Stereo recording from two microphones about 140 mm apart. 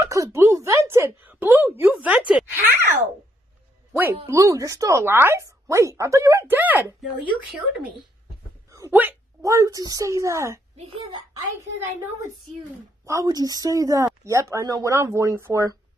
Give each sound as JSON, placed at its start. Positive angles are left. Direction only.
{"t": 0.0, "sound": "a woman's voice", "side_deg": -20}
{"t": 3.9, "sound": "speech", "side_deg": -20}
{"t": 8.7, "sound": "a sound", "side_deg": -20}
{"t": 9.4, "sound": "speech", "side_deg": -25}
{"t": 10.9, "sound": "a child's voice", "side_deg": -35}
{"t": 13.0, "sound": "speech", "side_deg": -25}